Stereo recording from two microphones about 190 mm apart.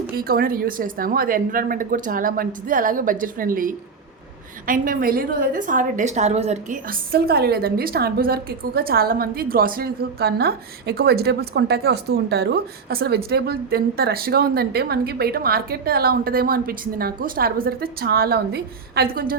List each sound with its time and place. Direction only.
0.1 s a woman's voice: 50° right (ahead or behind); by 6.7 s 35° right (ahead or behind)
7.1 s a woman's voice: 55° right (ahead or behind)